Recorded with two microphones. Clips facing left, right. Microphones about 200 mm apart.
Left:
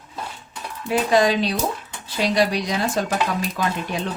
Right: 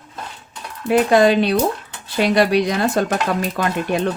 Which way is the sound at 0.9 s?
60° right (ahead or behind).